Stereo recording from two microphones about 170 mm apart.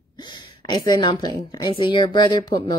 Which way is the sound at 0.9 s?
25° left (ahead or behind).